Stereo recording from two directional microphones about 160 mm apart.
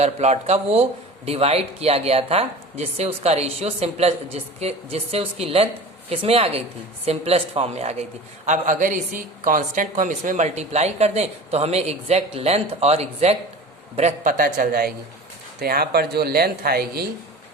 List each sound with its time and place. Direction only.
0.0 s speech: 45° right (ahead or behind)
8.4 s a woman's voice: 55° right (ahead or behind)
14.3 s speech: 65° right (ahead or behind)